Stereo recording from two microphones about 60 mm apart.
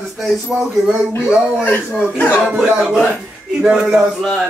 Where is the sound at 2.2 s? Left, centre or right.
Left.